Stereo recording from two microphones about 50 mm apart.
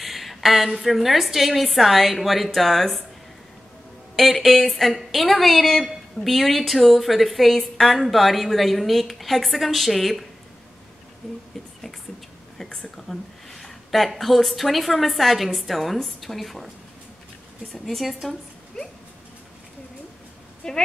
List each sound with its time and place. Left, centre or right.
0.0 s a woman's voice: centre
4.2 s a woman's voice: centre
12.5 s a woman's voice: centre
17.8 s a woman's voice: centre
20.6 s a woman's voice: centre